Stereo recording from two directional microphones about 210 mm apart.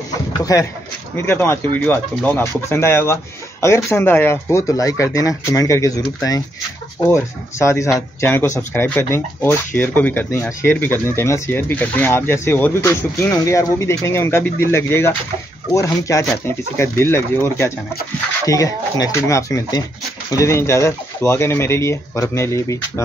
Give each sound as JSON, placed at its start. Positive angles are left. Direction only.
{"t": 0.4, "sound": "speech", "side_deg": 15}